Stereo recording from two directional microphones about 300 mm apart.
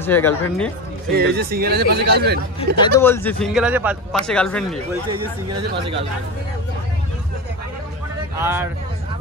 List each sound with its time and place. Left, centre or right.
0.0 s speech: centre
1.1 s speech: right
2.8 s a man's voice: centre
8.4 s speech: centre